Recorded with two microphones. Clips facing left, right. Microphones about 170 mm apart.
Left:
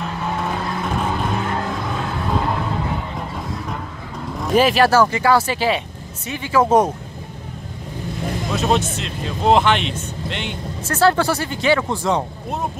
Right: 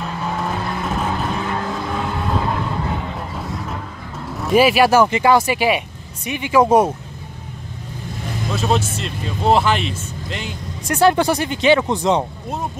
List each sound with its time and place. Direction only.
0.4 s vehicle: centre (ahead or behind)
4.4 s speech: 5° right (ahead or behind)
8.5 s speech: centre (ahead or behind)
10.9 s speech: 15° right (ahead or behind)